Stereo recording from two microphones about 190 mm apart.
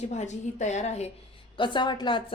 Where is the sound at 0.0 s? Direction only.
35° left (ahead or behind).